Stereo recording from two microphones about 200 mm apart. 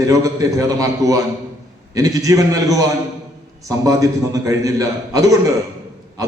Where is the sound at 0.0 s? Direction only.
15° right (ahead or behind).